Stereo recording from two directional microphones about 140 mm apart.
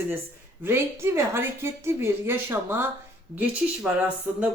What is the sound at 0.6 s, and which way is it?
Speech, 15° right (ahead or behind).